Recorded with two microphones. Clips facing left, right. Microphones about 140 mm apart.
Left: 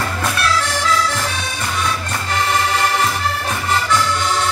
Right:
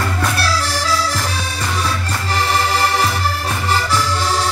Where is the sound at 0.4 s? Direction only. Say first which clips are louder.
Left 1 dB; 35° right (ahead or behind).